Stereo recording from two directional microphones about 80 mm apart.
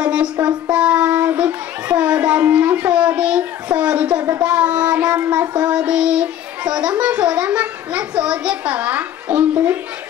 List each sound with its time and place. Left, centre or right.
0.0 s child singing: centre
0.5 s a child's voice: centre
4.4 s child singing: centre
5.7 s a child's voice: centre